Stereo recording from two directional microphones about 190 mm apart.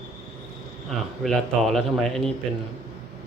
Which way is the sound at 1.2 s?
Centre (ahead or behind).